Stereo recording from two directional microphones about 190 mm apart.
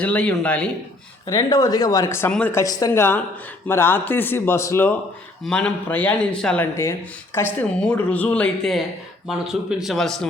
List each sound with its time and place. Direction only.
0.0 s speech: 5° left (ahead or behind)
1.3 s a man's voice: 20° left (ahead or behind); by 10.2 s centre (ahead or behind)